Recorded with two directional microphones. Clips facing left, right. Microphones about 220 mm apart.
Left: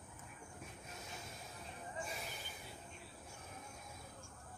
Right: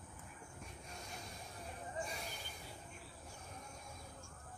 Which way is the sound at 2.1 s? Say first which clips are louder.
Even; centre (ahead or behind).